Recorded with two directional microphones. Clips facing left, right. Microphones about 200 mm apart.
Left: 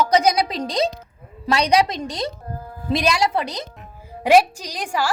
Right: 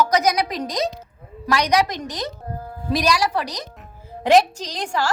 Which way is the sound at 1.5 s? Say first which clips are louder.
Left 1 dB; 30° left (ahead or behind).